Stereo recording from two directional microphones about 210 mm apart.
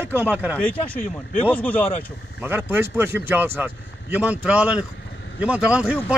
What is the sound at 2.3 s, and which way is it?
Speech, 10° right (ahead or behind).